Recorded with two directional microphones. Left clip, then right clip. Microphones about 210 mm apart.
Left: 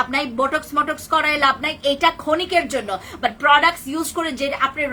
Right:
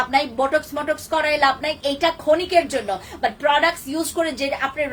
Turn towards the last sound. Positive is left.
turn(degrees=15)  # may be behind; listen again after turning